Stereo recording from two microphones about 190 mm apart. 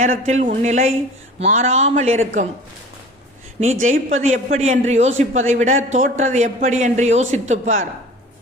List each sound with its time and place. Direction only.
0.3 s speech: 35° right (ahead or behind)
3.6 s speech: 40° right (ahead or behind)